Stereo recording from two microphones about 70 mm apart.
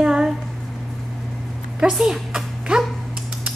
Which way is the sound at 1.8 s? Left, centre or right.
Centre.